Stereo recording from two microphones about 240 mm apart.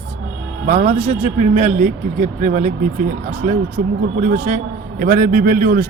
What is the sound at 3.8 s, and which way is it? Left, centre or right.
A man's voice, right.